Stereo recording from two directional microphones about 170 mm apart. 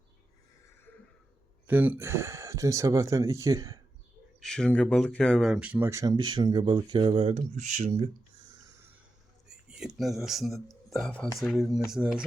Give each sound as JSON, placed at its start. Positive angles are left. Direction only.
{"t": 1.6, "sound": "speech", "side_deg": -10}
{"t": 4.4, "sound": "speech", "side_deg": 5}
{"t": 9.5, "sound": "speech", "side_deg": -5}